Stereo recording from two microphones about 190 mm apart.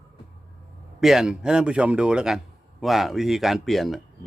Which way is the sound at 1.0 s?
Centre (ahead or behind).